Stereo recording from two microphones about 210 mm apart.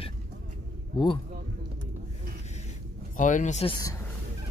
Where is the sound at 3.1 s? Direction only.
35° left (ahead or behind).